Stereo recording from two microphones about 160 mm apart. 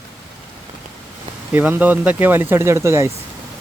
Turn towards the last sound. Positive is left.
turn(degrees=-15)  # may be behind; listen again after turning